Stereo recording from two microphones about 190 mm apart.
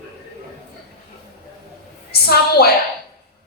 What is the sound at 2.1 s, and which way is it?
Speech, 55° left (ahead or behind).